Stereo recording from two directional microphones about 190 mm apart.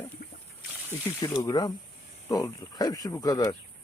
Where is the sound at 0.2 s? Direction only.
55° left (ahead or behind).